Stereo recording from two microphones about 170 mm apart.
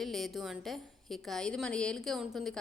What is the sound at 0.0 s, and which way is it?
A woman's voice, centre (ahead or behind).